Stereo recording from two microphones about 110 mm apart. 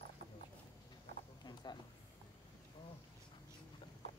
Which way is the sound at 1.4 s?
40° left (ahead or behind).